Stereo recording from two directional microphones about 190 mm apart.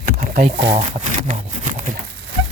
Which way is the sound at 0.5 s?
70° right (ahead or behind).